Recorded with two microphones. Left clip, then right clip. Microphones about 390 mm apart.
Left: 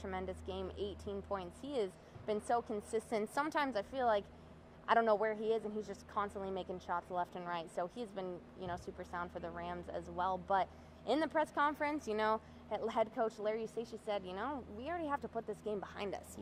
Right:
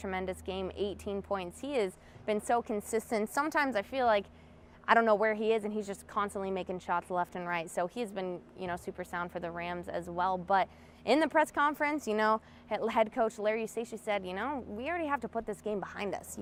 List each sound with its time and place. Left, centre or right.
0.0 s a woman's voice: right
11.1 s a woman's voice: right